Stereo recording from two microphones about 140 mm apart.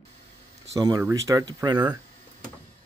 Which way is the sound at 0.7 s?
30° right (ahead or behind).